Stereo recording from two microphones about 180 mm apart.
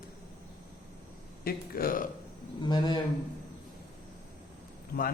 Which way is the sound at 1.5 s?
55° left (ahead or behind).